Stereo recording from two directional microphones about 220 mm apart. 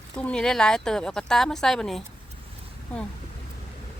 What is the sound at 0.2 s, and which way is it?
Speech, 5° left (ahead or behind).